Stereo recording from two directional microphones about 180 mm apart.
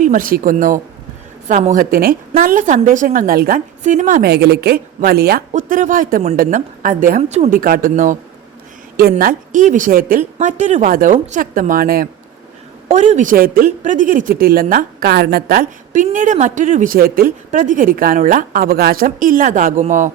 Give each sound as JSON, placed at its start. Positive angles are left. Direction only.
{"t": 0.0, "sound": "speech", "side_deg": -45}
{"t": 5.5, "sound": "speech", "side_deg": -45}
{"t": 10.3, "sound": "speech", "side_deg": -40}
{"t": 12.9, "sound": "speech", "side_deg": -40}